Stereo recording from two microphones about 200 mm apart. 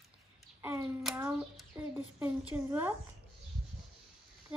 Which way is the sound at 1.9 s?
10° right (ahead or behind).